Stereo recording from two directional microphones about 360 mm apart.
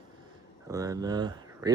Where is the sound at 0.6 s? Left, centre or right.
Centre.